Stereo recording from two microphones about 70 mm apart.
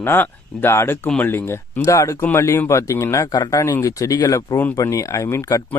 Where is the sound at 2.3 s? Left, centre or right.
Left.